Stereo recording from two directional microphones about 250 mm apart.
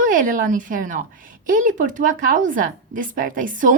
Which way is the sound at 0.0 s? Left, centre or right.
Right.